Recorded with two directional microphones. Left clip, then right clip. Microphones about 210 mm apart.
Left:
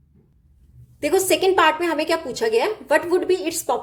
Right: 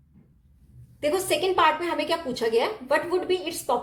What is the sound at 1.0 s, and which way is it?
A woman's voice, 35° left (ahead or behind).